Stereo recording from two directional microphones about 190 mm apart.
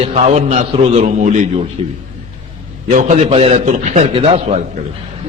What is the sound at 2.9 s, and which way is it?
A man's voice, 35° right (ahead or behind).